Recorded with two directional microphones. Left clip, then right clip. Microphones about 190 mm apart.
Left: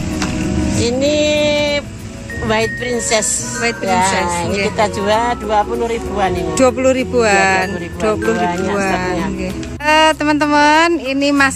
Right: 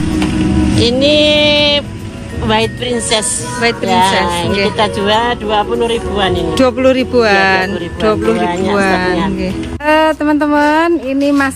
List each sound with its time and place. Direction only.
0.7 s music: 50° left (ahead or behind)
2.4 s speech: 40° left (ahead or behind)
6.5 s speech: 10° left (ahead or behind)